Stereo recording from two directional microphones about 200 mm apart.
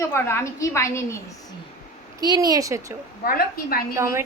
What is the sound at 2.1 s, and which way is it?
Speech, 20° right (ahead or behind).